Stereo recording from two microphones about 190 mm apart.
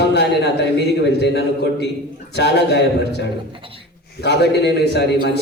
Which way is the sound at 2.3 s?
60° left (ahead or behind).